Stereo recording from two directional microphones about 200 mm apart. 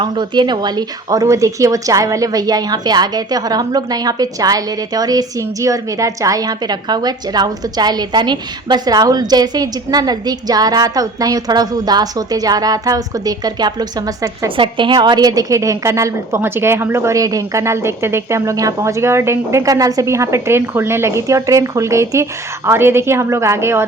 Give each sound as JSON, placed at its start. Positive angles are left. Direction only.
{"t": 0.0, "sound": "speech", "side_deg": -20}